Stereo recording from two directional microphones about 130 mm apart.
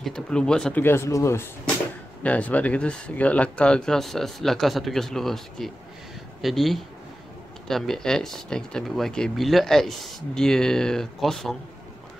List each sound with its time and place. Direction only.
0.0 s speech: 5° left (ahead or behind)
0.8 s speech: 20° left (ahead or behind)
2.2 s speech: 10° left (ahead or behind)